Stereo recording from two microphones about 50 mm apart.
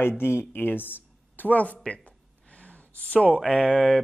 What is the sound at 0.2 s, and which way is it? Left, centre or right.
Speech, left.